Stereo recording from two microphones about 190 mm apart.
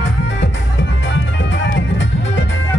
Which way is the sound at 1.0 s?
70° left (ahead or behind).